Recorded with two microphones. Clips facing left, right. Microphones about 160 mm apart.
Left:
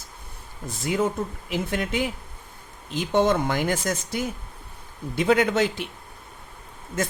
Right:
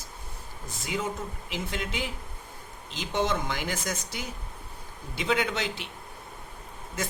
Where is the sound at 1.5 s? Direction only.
50° left (ahead or behind).